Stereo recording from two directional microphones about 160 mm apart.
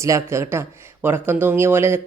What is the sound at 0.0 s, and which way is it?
Speech, 20° right (ahead or behind).